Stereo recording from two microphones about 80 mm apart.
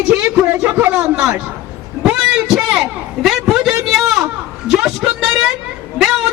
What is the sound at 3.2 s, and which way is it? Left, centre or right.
Speech, centre.